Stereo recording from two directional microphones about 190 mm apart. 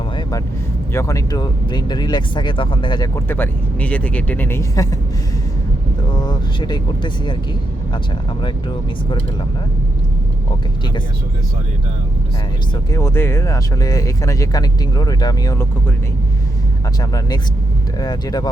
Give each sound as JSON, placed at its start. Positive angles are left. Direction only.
{"t": 0.2, "sound": "vehicle", "side_deg": 20}
{"t": 0.9, "sound": "speech", "side_deg": 15}
{"t": 3.2, "sound": "speech", "side_deg": 10}
{"t": 6.1, "sound": "speech", "side_deg": 25}
{"t": 12.9, "sound": "speech", "side_deg": 15}
{"t": 17.0, "sound": "speech", "side_deg": 20}